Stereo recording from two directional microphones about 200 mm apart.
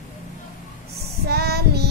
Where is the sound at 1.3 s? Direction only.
55° right (ahead or behind).